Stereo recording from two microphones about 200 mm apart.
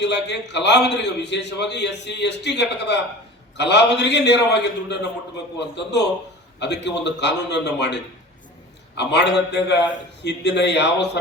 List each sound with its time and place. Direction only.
0.0 s a man's voice: 60° left (ahead or behind)